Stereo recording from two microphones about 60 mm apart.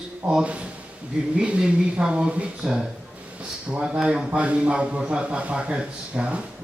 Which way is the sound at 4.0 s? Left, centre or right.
Centre.